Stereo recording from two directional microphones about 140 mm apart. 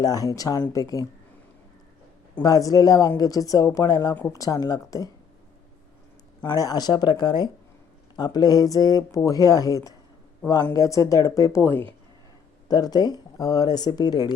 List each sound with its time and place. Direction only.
0.0 s speech: 25° left (ahead or behind)
2.3 s speech: 25° left (ahead or behind)
4.1 s speech: 15° left (ahead or behind)
4.4 s speech: 25° left (ahead or behind)
6.4 s speech: 30° left (ahead or behind)
12.6 s speech: 30° left (ahead or behind)